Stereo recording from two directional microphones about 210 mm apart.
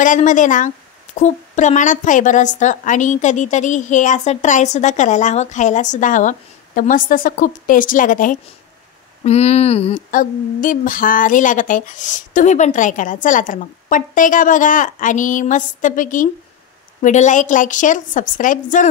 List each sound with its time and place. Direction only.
0.0 s a woman's voice: 40° left (ahead or behind)